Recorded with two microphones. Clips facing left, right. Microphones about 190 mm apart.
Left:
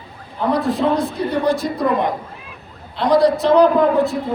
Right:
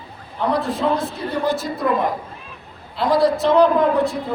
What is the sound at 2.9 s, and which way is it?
A man's voice, centre (ahead or behind).